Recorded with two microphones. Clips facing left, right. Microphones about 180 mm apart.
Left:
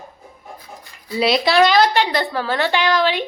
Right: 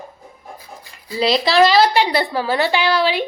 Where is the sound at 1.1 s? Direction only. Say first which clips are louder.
Even; centre (ahead or behind).